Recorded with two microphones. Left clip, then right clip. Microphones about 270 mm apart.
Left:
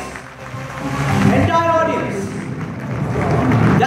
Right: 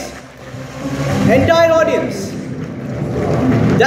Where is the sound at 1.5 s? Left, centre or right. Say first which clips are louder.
Right 4 dB; centre.